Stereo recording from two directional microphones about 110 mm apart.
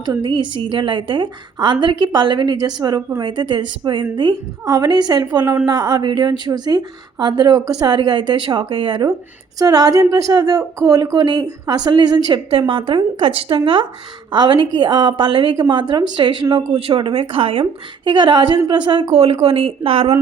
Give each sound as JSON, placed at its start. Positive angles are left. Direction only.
{"t": 0.0, "sound": "a woman's voice", "side_deg": -40}
{"t": 12.3, "sound": "a woman's voice", "side_deg": -55}